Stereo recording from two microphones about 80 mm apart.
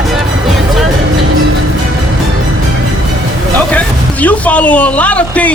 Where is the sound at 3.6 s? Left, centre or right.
Centre.